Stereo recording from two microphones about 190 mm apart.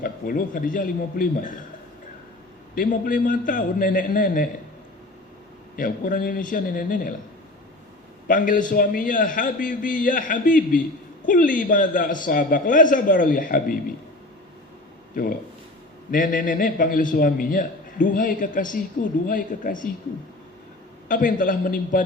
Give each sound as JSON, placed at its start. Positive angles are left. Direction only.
{"t": 0.0, "sound": "a man's voice", "side_deg": 45}
{"t": 2.7, "sound": "a man's voice", "side_deg": 45}
{"t": 5.7, "sound": "a man's voice", "side_deg": 45}
{"t": 8.3, "sound": "a man's voice", "side_deg": 45}
{"t": 16.1, "sound": "a man's voice", "side_deg": 45}
{"t": 21.1, "sound": "a man's voice", "side_deg": 45}